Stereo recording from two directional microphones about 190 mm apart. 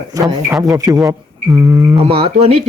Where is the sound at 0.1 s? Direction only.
20° right (ahead or behind).